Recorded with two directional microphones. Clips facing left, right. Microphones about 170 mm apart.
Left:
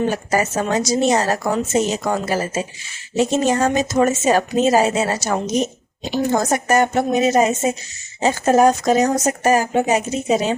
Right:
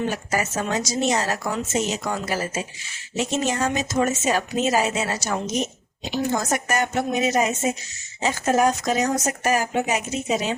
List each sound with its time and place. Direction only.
0.0 s speech: 35° left (ahead or behind)